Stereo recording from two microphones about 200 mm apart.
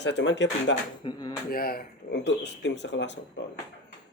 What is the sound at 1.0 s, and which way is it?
Speech, 25° left (ahead or behind).